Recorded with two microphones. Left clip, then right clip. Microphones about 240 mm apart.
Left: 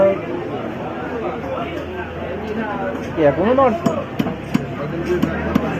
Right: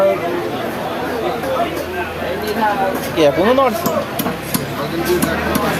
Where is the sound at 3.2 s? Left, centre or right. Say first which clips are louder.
Right 2 dB; centre.